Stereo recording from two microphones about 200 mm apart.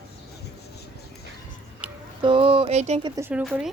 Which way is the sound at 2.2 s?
25° right (ahead or behind).